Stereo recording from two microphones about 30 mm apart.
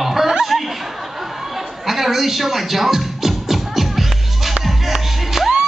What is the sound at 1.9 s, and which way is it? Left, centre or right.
Music, centre.